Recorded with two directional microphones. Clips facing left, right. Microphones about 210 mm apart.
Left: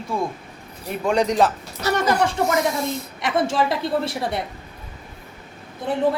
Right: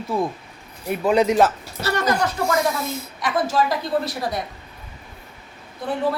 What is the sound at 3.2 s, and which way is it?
A woman's voice, 25° left (ahead or behind).